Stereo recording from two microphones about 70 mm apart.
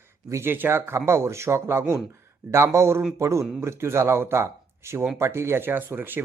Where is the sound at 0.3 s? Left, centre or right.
Right.